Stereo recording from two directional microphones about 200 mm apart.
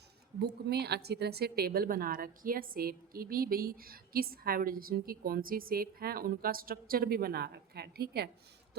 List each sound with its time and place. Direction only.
0.7 s a woman's voice: 55° right (ahead or behind)